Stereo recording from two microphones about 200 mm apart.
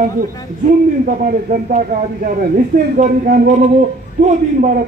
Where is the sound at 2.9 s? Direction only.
45° right (ahead or behind).